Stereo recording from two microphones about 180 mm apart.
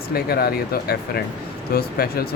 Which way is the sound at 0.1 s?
60° left (ahead or behind).